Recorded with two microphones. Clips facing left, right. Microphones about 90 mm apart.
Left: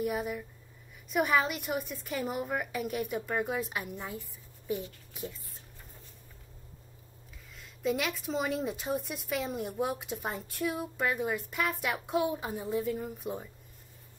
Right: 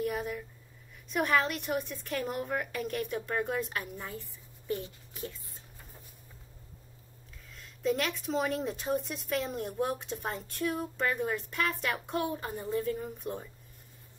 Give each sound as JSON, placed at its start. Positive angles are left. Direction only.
{"t": 0.0, "sound": "speech", "side_deg": 5}
{"t": 7.5, "sound": "speech", "side_deg": 5}